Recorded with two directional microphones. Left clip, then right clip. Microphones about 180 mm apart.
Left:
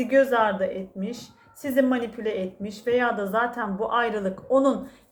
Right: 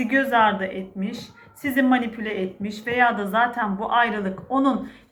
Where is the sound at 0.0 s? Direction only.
45° left (ahead or behind).